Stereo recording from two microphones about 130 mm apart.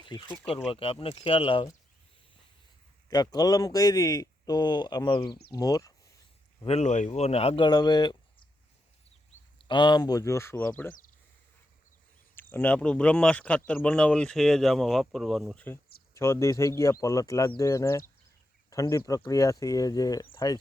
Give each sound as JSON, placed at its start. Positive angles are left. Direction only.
{"t": 0.1, "sound": "speech", "side_deg": 30}
{"t": 0.7, "sound": "speech", "side_deg": 45}
{"t": 3.1, "sound": "speech", "side_deg": 30}
{"t": 6.7, "sound": "speech", "side_deg": 60}
{"t": 7.7, "sound": "speech", "side_deg": 35}
{"t": 9.6, "sound": "speech", "side_deg": 35}
{"t": 12.4, "sound": "speech", "side_deg": 15}
{"t": 15.6, "sound": "speech", "side_deg": 20}